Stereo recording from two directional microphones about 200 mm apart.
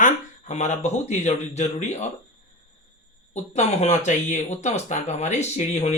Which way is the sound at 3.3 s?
35° left (ahead or behind).